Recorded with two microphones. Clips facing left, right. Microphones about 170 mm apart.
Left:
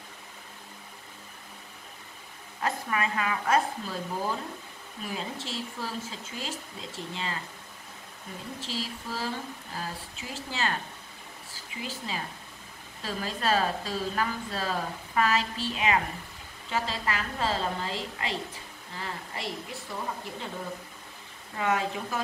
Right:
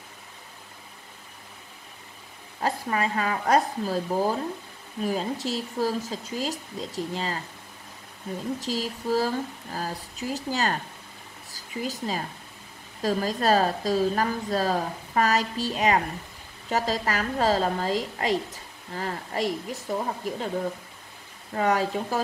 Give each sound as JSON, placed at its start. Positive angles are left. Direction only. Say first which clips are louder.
{"t": 2.6, "sound": "a woman's voice", "louder": "right 3 dB", "side_deg": -35}
{"t": 8.5, "sound": "a woman's voice", "louder": "right 6 dB", "side_deg": -40}
{"t": 21.5, "sound": "a woman's voice", "louder": "right 5 dB", "side_deg": -35}